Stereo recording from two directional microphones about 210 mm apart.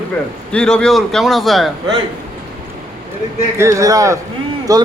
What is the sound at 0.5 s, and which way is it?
A man's voice, 5° left (ahead or behind).